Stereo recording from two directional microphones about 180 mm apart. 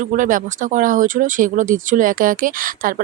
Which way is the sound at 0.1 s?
50° right (ahead or behind).